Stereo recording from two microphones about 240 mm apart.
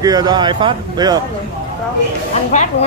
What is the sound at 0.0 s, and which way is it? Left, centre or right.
Speech, centre.